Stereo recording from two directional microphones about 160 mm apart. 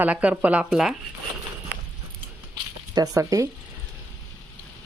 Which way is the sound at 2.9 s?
20° right (ahead or behind).